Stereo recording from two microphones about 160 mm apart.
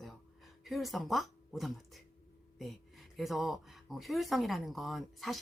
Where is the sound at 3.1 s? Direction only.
Centre (ahead or behind).